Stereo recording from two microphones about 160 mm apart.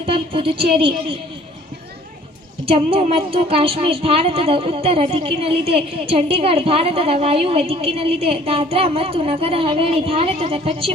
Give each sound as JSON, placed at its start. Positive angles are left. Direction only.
{"t": 0.0, "sound": "a woman's voice", "side_deg": -35}
{"t": 2.6, "sound": "a woman's voice", "side_deg": -35}